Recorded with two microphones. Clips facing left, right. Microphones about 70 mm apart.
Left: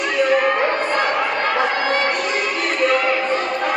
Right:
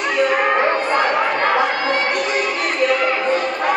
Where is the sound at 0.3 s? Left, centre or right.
Centre.